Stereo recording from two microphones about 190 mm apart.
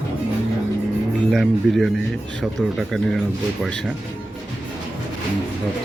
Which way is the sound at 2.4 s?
Centre (ahead or behind).